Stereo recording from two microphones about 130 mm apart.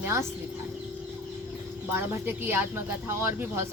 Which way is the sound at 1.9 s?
15° right (ahead or behind).